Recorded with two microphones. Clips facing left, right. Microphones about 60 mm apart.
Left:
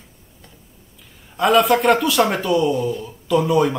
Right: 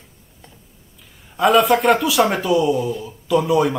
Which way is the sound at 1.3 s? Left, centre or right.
Centre.